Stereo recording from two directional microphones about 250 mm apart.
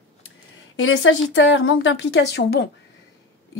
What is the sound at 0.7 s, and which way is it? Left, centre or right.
A woman's voice, left.